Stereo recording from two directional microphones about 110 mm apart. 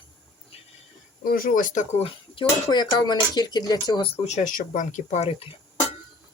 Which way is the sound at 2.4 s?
40° left (ahead or behind).